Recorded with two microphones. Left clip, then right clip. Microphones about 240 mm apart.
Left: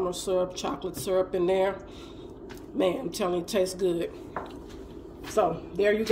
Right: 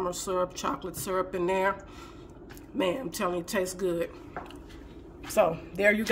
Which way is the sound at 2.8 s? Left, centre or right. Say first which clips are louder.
Left 2 dB; right.